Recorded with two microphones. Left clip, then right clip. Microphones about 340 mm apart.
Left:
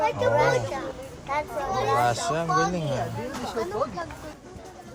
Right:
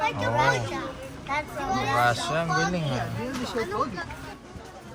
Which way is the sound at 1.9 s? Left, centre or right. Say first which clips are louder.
Right 2 dB; centre.